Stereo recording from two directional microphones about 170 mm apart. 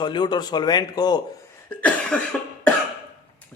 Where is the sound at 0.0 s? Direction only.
25° left (ahead or behind).